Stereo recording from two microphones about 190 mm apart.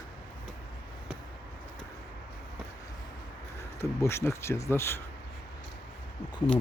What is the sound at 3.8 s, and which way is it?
Speech, 15° left (ahead or behind).